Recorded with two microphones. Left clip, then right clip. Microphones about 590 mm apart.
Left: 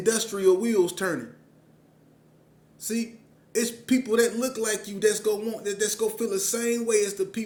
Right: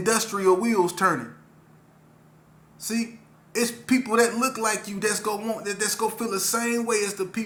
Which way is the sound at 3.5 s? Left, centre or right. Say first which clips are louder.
Right 1 dB; left.